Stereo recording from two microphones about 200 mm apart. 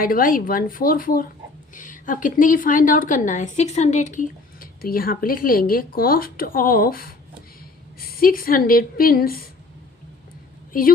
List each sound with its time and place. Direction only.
0.0 s a woman's voice: 45° left (ahead or behind)
10.7 s a woman's voice: 45° left (ahead or behind)